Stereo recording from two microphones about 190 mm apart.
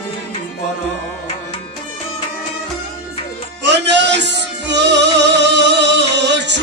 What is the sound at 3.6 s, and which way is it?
Music, 65° right (ahead or behind).